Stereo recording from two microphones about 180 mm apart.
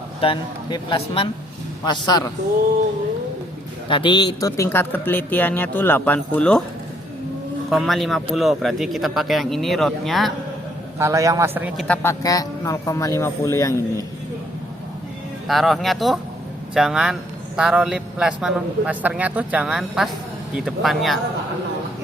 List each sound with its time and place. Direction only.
0.2 s a man's voice: 30° left (ahead or behind)
3.8 s speech: 30° left (ahead or behind); by 6.6 s 5° left (ahead or behind)
7.7 s speech: centre (ahead or behind)
10.9 s a man's voice: 15° right (ahead or behind)
12.0 s speech: 20° left (ahead or behind)
15.4 s speech: centre (ahead or behind)